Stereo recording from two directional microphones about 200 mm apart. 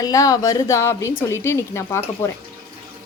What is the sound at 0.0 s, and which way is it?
A woman's voice, 15° left (ahead or behind).